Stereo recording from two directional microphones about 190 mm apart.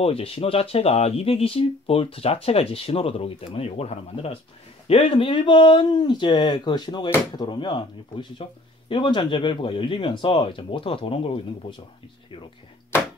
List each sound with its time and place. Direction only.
0.0 s speech: 30° left (ahead or behind)